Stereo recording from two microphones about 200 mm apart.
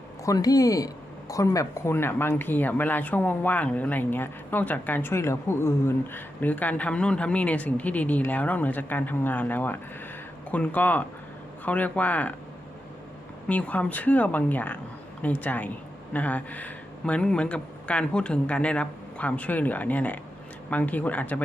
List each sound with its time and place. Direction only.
0.3 s speech: 20° left (ahead or behind)
13.5 s speech: 5° left (ahead or behind)